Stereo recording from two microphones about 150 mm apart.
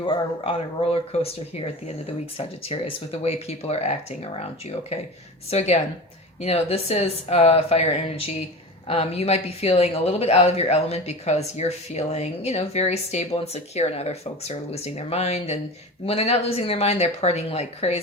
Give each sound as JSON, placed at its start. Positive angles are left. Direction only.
{"t": 0.0, "sound": "speech", "side_deg": 40}
{"t": 2.6, "sound": "speech", "side_deg": 40}